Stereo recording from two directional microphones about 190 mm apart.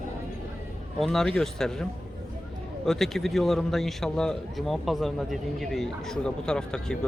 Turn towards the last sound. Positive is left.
turn(degrees=5)  # may be behind; listen again after turning